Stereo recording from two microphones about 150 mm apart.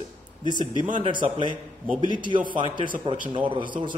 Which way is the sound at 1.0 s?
30° right (ahead or behind).